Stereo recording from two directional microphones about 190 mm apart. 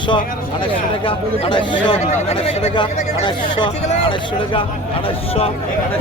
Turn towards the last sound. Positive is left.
turn(degrees=30)  # may be behind; listen again after turning